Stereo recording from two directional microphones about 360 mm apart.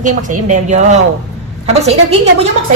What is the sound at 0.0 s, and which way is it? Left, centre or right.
Speech, right.